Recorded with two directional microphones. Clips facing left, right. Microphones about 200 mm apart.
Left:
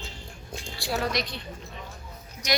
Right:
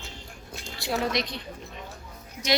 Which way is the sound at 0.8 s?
20° right (ahead or behind).